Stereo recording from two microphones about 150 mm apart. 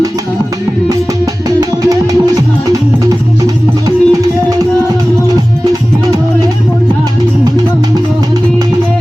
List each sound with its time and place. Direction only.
0.9 s music: 25° right (ahead or behind)
3.8 s music: 25° right (ahead or behind)